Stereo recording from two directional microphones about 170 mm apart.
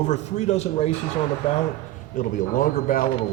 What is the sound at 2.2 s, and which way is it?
Speech, 50° left (ahead or behind).